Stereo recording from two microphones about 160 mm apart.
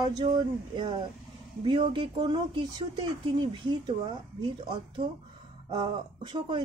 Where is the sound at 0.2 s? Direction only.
30° right (ahead or behind).